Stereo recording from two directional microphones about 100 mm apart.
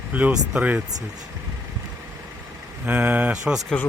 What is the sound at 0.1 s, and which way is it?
Speech, 15° right (ahead or behind).